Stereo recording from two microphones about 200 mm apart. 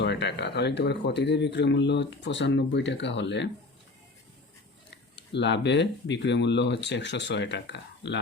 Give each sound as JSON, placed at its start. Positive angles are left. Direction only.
{"t": 0.0, "sound": "speech", "side_deg": 60}
{"t": 4.9, "sound": "speech", "side_deg": 60}